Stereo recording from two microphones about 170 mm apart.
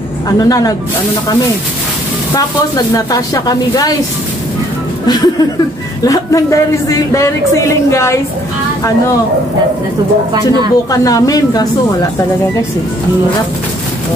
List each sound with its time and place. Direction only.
0.4 s speech: 20° left (ahead or behind)
3.1 s speech: 20° left (ahead or behind)
5.0 s speech: 25° left (ahead or behind)
10.3 s speech: 25° right (ahead or behind)
10.9 s speech: 20° left (ahead or behind)